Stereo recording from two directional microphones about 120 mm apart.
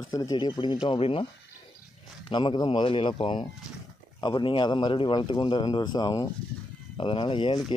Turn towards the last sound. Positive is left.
turn(degrees=45)  # may be behind; listen again after turning